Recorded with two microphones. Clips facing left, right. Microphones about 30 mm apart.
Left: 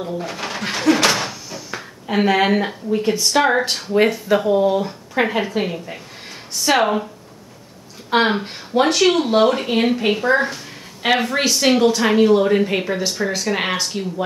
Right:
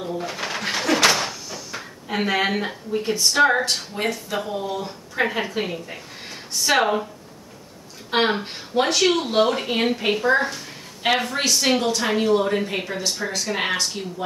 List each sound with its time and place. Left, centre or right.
0.0 s speech: centre
5.4 s speech: centre
8.1 s speech: centre